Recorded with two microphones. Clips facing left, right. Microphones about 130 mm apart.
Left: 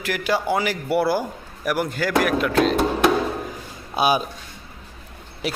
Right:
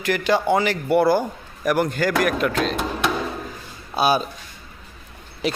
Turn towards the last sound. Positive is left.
turn(degrees=5)  # may be behind; listen again after turning